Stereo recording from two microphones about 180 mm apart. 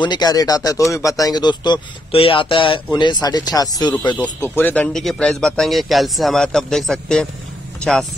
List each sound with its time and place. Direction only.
0.0 s speech: 25° left (ahead or behind)
4.2 s speech: 10° left (ahead or behind)